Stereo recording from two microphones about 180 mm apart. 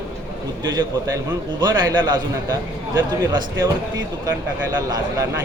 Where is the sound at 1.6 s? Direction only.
25° right (ahead or behind).